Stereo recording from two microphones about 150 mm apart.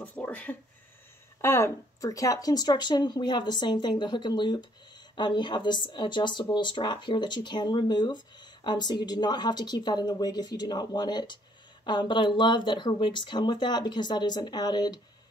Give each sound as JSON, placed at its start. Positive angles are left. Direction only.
{"t": 0.0, "sound": "speech", "side_deg": 10}